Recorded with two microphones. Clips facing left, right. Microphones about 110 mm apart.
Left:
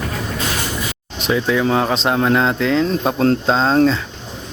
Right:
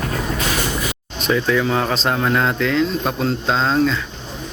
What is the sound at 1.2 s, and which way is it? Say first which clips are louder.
Speech: left 1 dB; 15° left (ahead or behind).